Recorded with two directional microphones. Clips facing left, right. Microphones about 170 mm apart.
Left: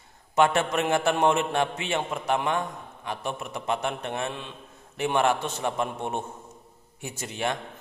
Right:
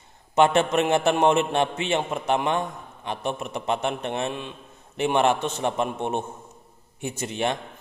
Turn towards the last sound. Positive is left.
turn(degrees=-20)  # may be behind; listen again after turning